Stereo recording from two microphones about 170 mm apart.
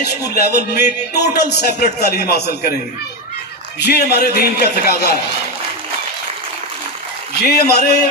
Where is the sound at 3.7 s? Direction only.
75° left (ahead or behind).